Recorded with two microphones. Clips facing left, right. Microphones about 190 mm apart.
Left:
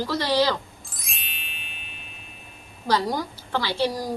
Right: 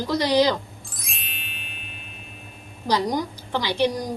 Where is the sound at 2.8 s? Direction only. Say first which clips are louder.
Right 1 dB; 15° right (ahead or behind).